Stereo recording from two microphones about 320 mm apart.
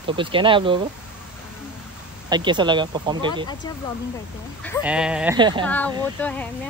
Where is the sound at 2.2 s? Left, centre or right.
Centre.